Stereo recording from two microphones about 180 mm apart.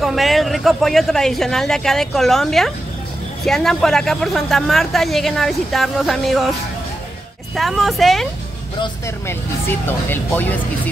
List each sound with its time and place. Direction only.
0.0 s speech: centre (ahead or behind)
7.5 s speech: centre (ahead or behind)
8.7 s speech: 25° left (ahead or behind)
9.3 s speech: 10° left (ahead or behind)